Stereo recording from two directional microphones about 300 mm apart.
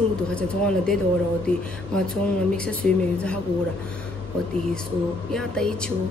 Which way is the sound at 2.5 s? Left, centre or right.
Centre.